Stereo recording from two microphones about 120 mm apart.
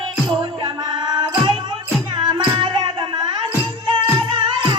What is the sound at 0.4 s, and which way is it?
Music, 35° right (ahead or behind).